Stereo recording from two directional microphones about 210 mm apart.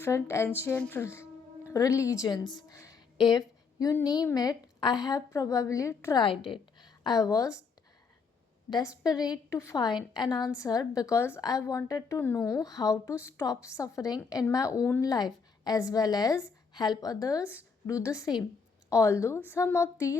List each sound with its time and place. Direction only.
0.0 s a woman's voice: 15° left (ahead or behind)
9.3 s a woman's voice: 15° left (ahead or behind)
17.4 s speech: 5° right (ahead or behind)
17.8 s a woman's voice: 15° left (ahead or behind)